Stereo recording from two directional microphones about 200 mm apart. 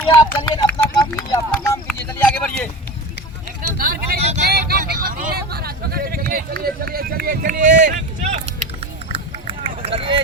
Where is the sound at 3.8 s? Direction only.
50° right (ahead or behind).